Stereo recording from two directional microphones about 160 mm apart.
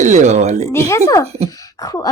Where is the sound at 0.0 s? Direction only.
45° right (ahead or behind).